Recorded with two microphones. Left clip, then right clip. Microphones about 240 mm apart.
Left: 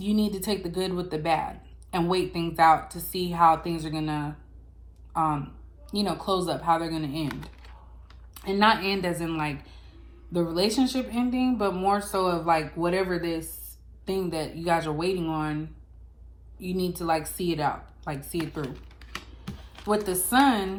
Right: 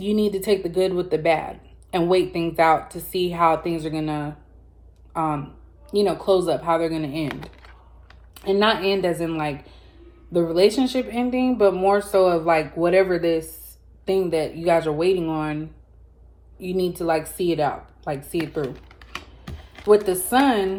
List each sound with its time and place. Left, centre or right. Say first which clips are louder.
0.0 s speech: right 6 dB; centre
0.6 s speech: right 8 dB; left
1.5 s speech: right 4 dB; centre
8.3 s speech: right 3 dB; centre
16.6 s speech: right 6 dB; centre
18.9 s computer keyboard: right 4 dB; centre
20.1 s speech: right 3 dB; centre